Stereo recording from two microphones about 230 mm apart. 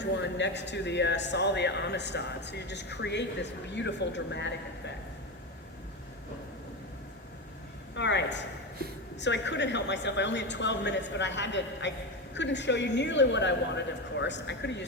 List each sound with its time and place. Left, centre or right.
0.0 s a woman's voice: left
7.9 s a woman's voice: left